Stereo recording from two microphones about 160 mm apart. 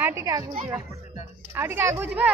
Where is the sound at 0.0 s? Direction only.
15° right (ahead or behind).